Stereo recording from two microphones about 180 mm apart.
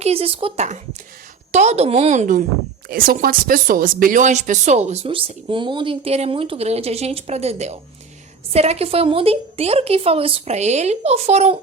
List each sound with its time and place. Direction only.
0.0 s speech: 35° right (ahead or behind)